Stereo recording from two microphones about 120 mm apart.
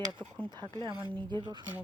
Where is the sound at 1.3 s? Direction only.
40° right (ahead or behind).